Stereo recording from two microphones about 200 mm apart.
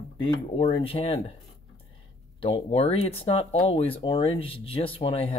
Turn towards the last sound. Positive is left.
turn(degrees=25)  # may be behind; listen again after turning